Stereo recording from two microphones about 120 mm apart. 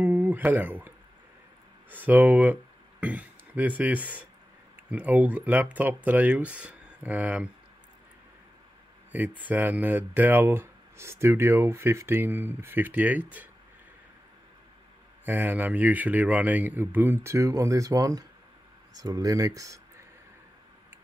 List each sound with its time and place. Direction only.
0.0 s a sound: 15° right (ahead or behind)
1.9 s speech: 15° right (ahead or behind)
9.5 s speech: 15° right (ahead or behind)
15.2 s speech: 15° right (ahead or behind)